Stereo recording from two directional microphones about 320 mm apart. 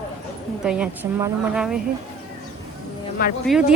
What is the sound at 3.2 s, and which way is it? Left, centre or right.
Speech, left.